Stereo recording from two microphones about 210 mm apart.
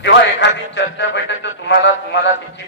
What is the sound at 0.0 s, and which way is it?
A man's voice, 60° left (ahead or behind).